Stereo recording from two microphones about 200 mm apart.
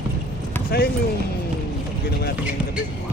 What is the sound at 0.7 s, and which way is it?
Speech, 50° left (ahead or behind).